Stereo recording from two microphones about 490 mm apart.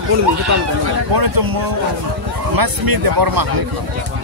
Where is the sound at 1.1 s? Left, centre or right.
Right.